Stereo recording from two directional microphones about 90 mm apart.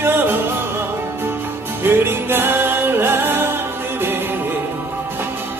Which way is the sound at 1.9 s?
25° right (ahead or behind).